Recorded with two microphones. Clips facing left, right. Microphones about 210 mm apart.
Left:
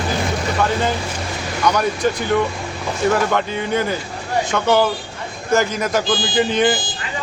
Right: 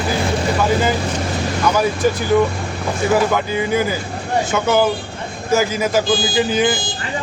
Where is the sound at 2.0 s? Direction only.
5° right (ahead or behind).